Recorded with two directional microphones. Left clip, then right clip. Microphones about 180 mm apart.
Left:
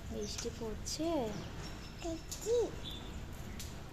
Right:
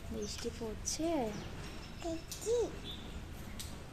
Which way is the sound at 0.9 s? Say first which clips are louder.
Right 1 dB; 20° right (ahead or behind).